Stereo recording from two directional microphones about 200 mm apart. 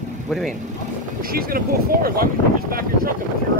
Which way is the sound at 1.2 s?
45° right (ahead or behind).